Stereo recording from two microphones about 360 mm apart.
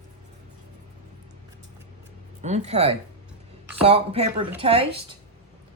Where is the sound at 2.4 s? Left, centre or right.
Centre.